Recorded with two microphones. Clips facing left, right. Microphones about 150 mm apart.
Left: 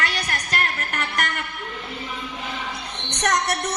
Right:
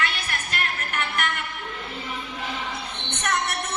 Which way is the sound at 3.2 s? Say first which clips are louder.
Left 4 dB; 40° left (ahead or behind).